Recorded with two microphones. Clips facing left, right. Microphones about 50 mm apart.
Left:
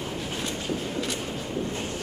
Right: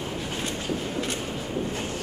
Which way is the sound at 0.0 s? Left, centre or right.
Centre.